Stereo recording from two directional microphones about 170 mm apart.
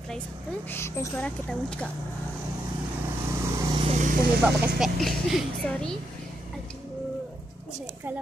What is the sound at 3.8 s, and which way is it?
Vehicle, 45° right (ahead or behind).